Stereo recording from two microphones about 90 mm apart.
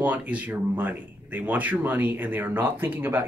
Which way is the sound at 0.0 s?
20° right (ahead or behind).